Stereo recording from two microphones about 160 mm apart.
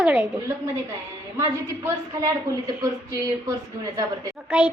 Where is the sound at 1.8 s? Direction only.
20° right (ahead or behind).